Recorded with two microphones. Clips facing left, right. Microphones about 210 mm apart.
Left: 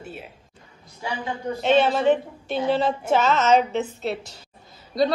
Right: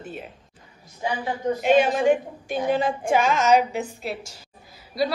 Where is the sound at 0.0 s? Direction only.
5° left (ahead or behind).